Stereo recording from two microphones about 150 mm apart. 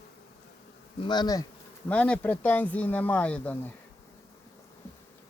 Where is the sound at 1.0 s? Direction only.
30° left (ahead or behind).